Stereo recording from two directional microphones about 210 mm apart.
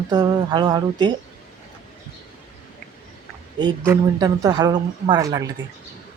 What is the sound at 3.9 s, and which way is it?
Speech, 15° right (ahead or behind).